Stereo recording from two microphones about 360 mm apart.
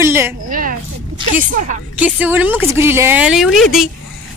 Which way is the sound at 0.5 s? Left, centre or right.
Right.